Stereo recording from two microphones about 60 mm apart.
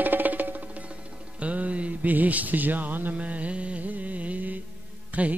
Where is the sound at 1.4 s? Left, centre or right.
Right.